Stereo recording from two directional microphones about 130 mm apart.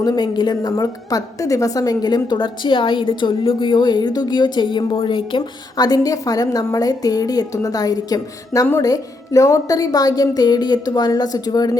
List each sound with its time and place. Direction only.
0.0 s a woman's voice: 30° left (ahead or behind)